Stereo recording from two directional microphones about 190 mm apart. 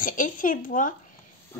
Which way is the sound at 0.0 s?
45° left (ahead or behind).